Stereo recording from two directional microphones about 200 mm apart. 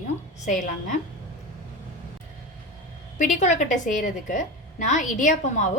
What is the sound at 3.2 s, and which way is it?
A woman's voice, 40° left (ahead or behind).